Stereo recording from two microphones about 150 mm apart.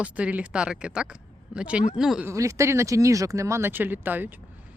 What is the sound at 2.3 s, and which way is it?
Speech, 20° right (ahead or behind).